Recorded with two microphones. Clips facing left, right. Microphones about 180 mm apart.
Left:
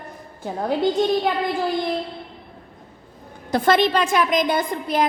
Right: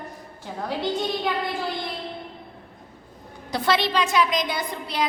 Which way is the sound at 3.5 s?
50° left (ahead or behind).